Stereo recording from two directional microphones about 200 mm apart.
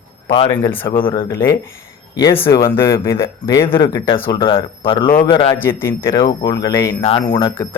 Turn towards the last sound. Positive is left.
turn(degrees=15)  # may be behind; listen again after turning